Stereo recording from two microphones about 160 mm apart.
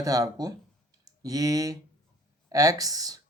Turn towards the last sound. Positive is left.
turn(degrees=-25)  # may be behind; listen again after turning